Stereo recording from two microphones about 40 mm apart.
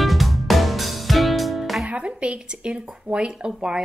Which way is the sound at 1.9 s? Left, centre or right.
Right.